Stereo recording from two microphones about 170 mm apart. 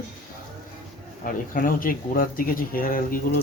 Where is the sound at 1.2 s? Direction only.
55° left (ahead or behind).